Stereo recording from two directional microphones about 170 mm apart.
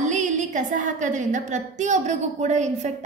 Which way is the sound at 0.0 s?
45° right (ahead or behind).